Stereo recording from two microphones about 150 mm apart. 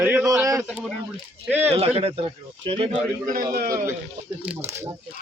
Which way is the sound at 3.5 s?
80° right.